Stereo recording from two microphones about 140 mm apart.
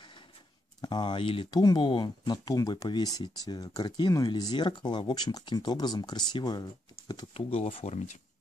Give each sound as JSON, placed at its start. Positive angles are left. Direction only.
{"t": 0.7, "sound": "speech", "side_deg": 30}
{"t": 7.3, "sound": "speech", "side_deg": 45}